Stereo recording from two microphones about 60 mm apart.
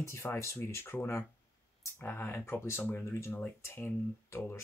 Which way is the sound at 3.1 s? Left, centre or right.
Left.